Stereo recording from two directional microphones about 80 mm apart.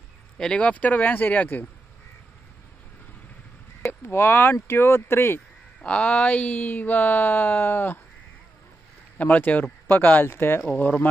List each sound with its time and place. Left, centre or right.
0.4 s speech: centre
4.1 s speech: left
5.8 s speech: centre
9.2 s speech: centre